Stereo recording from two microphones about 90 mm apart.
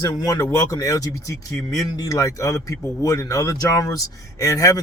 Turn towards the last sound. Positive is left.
turn(degrees=35)  # may be behind; listen again after turning